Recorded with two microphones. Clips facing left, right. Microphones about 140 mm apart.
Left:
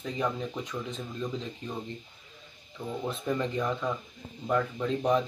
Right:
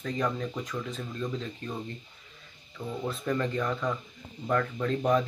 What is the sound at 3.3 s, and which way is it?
Speech, 15° left (ahead or behind).